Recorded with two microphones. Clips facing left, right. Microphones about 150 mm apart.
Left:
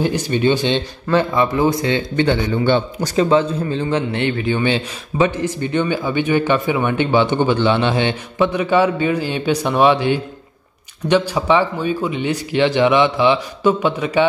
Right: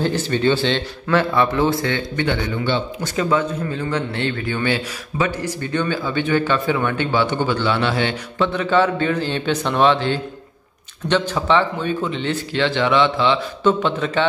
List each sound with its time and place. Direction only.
0.0 s a man's voice: 15° left (ahead or behind)
2.5 s a man's voice: 45° left (ahead or behind)
3.2 s a man's voice: 30° left (ahead or behind); by 14.2 s 10° left (ahead or behind)